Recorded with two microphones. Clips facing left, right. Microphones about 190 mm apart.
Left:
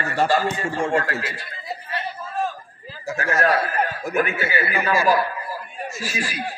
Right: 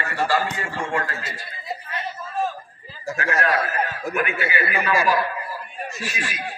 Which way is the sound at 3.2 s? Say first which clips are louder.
Left 2 dB; 45° left (ahead or behind).